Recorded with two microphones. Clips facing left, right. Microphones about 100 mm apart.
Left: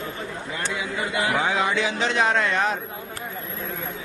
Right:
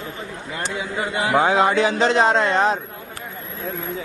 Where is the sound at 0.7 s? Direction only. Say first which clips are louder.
Right 3 dB; 30° right (ahead or behind).